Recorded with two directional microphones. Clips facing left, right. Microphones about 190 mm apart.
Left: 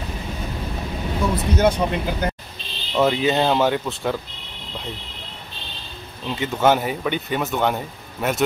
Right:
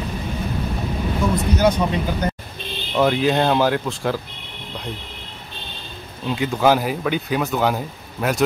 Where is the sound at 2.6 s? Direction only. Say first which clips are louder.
Right 9 dB; 55° right (ahead or behind).